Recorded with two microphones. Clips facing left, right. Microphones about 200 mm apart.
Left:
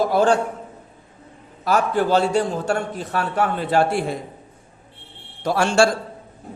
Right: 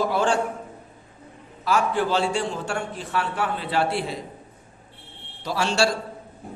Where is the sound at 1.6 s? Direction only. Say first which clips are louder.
Left 3 dB; 45° left (ahead or behind).